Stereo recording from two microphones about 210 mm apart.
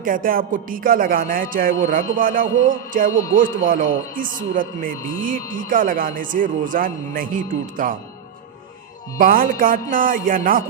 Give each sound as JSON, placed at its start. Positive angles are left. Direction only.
{"t": 0.0, "sound": "speech", "side_deg": -40}
{"t": 9.1, "sound": "speech", "side_deg": -40}